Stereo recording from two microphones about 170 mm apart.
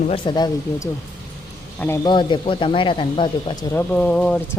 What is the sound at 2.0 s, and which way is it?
Speech, 25° left (ahead or behind).